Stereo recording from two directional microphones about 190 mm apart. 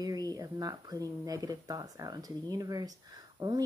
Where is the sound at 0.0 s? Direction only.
20° right (ahead or behind).